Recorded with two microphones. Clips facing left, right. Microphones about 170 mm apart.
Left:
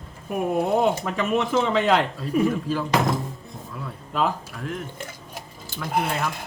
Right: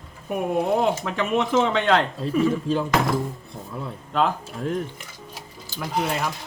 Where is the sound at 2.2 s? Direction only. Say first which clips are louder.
Right 1 dB; 25° right (ahead or behind).